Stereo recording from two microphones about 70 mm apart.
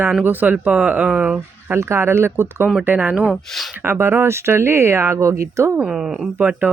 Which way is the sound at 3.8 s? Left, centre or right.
Right.